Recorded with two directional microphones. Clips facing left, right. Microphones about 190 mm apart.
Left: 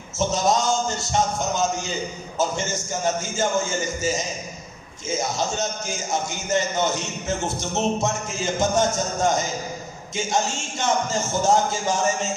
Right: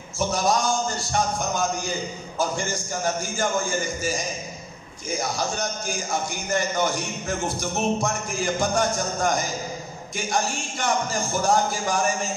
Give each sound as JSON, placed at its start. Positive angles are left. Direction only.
{"t": 0.2, "sound": "a man's voice", "side_deg": 20}